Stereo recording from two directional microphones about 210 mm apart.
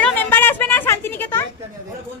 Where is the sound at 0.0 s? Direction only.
5° left (ahead or behind).